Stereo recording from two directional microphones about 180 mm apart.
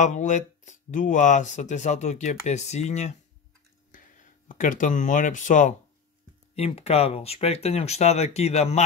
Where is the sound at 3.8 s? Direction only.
45° left (ahead or behind).